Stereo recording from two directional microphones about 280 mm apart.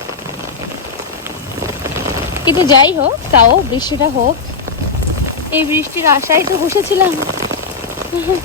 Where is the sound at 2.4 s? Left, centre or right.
Centre.